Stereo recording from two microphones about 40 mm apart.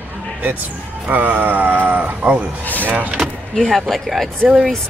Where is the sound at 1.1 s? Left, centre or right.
Right.